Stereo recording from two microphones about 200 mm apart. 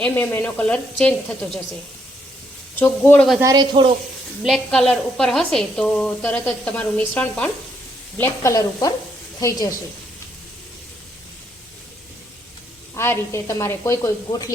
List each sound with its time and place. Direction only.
0.0 s a woman's voice: 10° left (ahead or behind)
2.7 s a woman's voice: 10° left (ahead or behind)
3.4 s speech: 20° right (ahead or behind)
4.4 s a woman's voice: centre (ahead or behind)
13.0 s a woman's voice: 15° left (ahead or behind)